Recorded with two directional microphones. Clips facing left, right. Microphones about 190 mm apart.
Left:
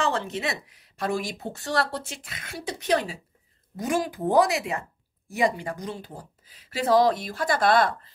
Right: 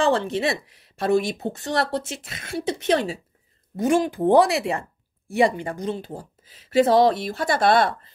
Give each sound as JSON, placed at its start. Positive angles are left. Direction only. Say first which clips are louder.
{"t": 0.0, "sound": "speech", "louder": "right 6 dB", "side_deg": -30}